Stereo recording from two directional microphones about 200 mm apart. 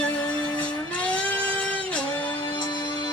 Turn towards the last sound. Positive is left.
turn(degrees=20)  # may be behind; listen again after turning